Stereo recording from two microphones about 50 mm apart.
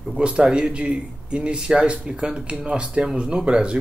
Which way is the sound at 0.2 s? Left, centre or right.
Right.